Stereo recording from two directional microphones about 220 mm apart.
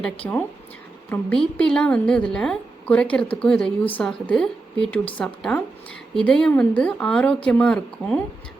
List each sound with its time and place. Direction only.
0.2 s a woman's voice: 10° left (ahead or behind)